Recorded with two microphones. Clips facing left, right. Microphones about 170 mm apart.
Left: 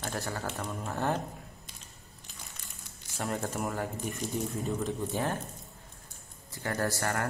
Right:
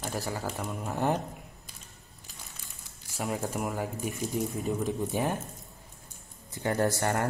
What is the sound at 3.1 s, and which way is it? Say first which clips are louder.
Speech: right 2 dB; 5° right (ahead or behind).